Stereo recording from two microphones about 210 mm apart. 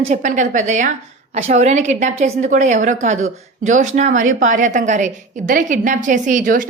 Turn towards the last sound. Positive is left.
turn(degrees=-40)  # may be behind; listen again after turning